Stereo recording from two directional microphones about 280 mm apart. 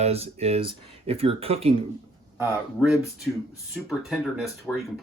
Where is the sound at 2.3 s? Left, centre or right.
Centre.